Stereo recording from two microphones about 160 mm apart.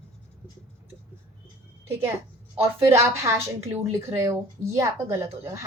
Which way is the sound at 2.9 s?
15° right (ahead or behind).